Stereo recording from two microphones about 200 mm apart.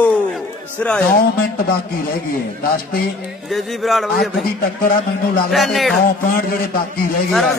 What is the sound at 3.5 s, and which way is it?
Speech, centre (ahead or behind).